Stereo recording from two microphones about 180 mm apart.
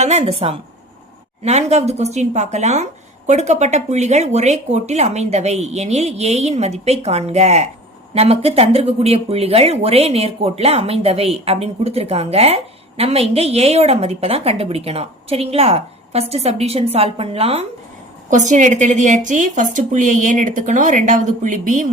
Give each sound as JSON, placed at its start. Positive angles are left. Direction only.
{"t": 0.0, "sound": "speech", "side_deg": -35}